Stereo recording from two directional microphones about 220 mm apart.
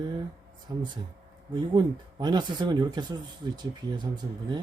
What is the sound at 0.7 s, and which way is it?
Speech, 15° right (ahead or behind).